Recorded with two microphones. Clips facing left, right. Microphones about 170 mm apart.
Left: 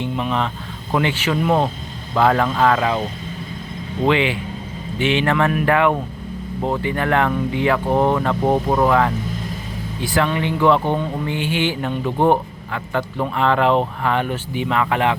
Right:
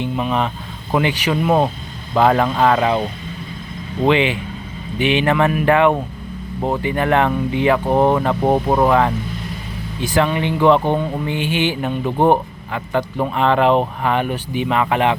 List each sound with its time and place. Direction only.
0.0 s speech: 15° right (ahead or behind)
4.0 s speech: 20° right (ahead or behind)